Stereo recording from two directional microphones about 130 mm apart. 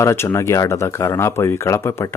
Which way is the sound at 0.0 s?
20° left (ahead or behind).